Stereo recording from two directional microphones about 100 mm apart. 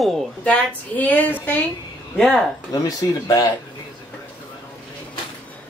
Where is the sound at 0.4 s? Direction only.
15° left (ahead or behind).